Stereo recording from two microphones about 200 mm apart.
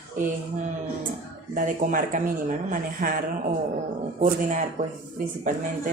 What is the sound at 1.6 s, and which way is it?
Speech, 40° right (ahead or behind).